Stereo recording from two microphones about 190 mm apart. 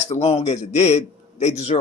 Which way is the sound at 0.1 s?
35° left (ahead or behind).